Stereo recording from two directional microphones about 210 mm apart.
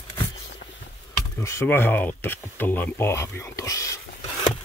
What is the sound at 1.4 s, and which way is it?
Speech, 15° left (ahead or behind).